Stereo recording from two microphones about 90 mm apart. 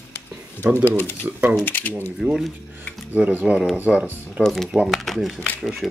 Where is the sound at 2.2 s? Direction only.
5° right (ahead or behind).